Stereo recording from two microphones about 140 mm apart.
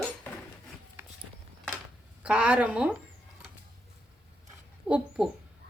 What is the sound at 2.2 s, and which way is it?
Speech, 10° right (ahead or behind).